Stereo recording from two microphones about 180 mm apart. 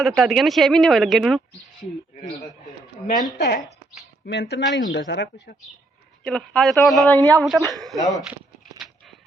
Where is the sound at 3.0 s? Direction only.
45° left (ahead or behind).